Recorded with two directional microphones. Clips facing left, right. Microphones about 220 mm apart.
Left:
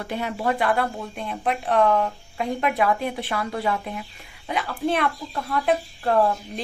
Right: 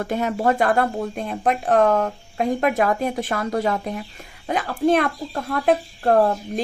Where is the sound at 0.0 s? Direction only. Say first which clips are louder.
Right 5 dB; 45° right (ahead or behind).